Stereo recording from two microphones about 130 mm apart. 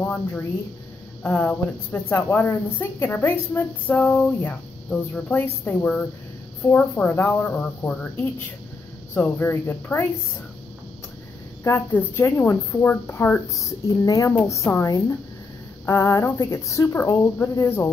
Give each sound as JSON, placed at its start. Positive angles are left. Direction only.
{"t": 0.0, "sound": "a woman's voice", "side_deg": 10}
{"t": 11.6, "sound": "a woman's voice", "side_deg": 15}